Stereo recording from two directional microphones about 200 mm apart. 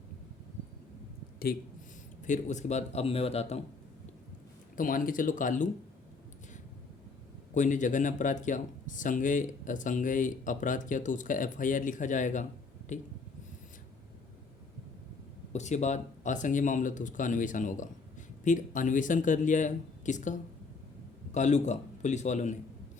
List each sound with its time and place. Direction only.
2.2 s speech: 35° left (ahead or behind)
4.8 s speech: 45° left (ahead or behind)
7.5 s speech: 40° left (ahead or behind)
15.5 s speech: 35° left (ahead or behind)
21.3 s speech: 35° left (ahead or behind)